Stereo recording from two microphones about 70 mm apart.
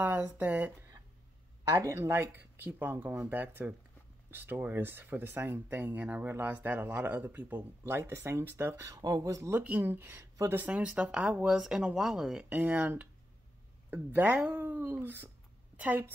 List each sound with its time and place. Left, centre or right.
0.0 s speech: right
1.6 s speech: right
8.9 s speech: right
9.5 s speech: right
10.8 s speech: centre
12.4 s speech: right
15.7 s a sound: right